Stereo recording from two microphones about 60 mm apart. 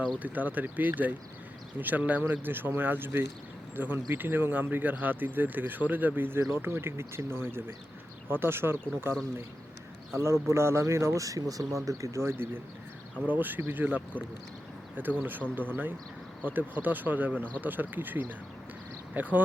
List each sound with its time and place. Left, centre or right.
0.2 s speech: right
11.9 s speech: right
13.2 s speech: right